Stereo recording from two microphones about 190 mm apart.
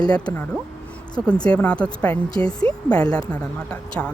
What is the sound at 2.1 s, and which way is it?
Speech, 30° right (ahead or behind).